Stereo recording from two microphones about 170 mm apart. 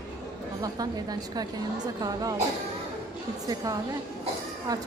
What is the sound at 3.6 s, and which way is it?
A woman's voice, 20° right (ahead or behind).